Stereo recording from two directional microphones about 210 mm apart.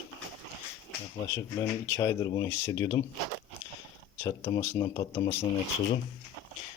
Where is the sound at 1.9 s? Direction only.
15° left (ahead or behind).